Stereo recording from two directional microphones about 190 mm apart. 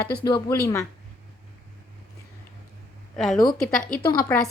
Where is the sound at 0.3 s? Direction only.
20° left (ahead or behind).